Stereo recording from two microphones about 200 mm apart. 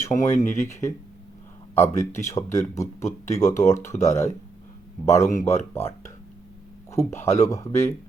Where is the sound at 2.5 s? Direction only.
15° left (ahead or behind).